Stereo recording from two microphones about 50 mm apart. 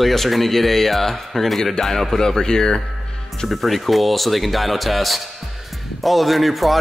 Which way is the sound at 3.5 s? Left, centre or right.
Centre.